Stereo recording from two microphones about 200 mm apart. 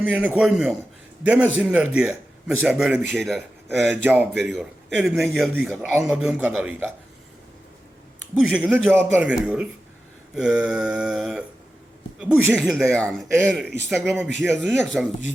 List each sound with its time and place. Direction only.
0.0 s a man's voice: 5° right (ahead or behind)
8.4 s speech: 5° right (ahead or behind)